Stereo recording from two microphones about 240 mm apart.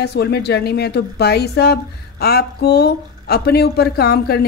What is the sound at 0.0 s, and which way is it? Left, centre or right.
A woman's voice, left.